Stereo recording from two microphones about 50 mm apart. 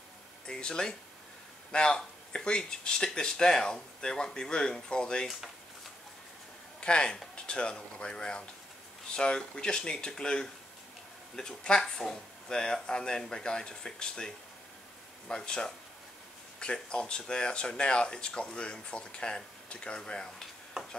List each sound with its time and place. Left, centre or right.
0.5 s speech: centre
6.8 s speech: centre